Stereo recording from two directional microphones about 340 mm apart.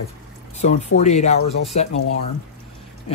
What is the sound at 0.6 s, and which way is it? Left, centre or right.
Speech, centre.